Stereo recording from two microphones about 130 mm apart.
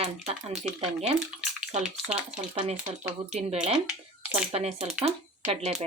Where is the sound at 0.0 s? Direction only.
55° right (ahead or behind).